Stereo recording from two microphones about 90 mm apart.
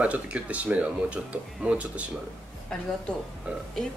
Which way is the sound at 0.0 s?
15° right (ahead or behind).